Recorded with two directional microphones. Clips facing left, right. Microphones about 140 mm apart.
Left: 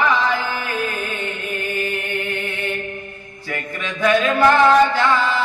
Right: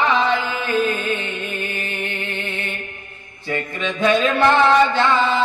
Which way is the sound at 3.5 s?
20° right (ahead or behind).